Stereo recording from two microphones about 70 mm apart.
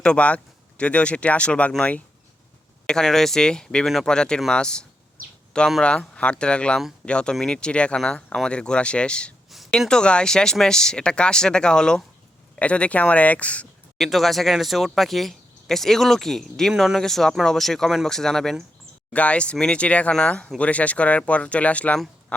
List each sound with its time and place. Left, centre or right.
0.0 s speech: centre
2.8 s speech: centre
3.8 s speech: centre
4.1 s speech: centre
14.0 s speech: centre
19.1 s speech: centre